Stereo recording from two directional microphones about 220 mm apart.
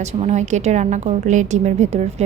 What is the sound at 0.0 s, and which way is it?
A woman's voice, 30° right (ahead or behind).